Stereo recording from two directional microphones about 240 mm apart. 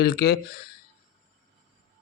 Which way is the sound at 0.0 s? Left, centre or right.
Left.